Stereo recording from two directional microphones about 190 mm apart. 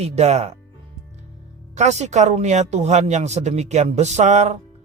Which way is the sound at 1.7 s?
35° right (ahead or behind).